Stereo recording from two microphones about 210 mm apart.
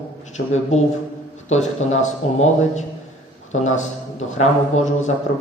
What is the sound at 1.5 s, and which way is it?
Speech, 35° left (ahead or behind).